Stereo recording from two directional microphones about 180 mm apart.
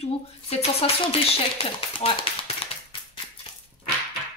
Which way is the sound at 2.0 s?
30° left (ahead or behind).